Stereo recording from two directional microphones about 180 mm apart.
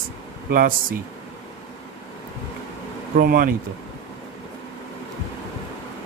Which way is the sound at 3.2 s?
55° right (ahead or behind).